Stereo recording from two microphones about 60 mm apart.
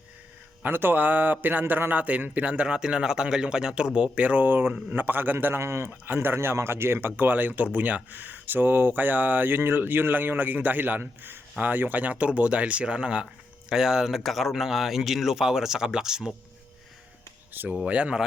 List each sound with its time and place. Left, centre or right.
0.6 s a man's voice: right; by 16.3 s centre
17.5 s speech: right
17.7 s speech: centre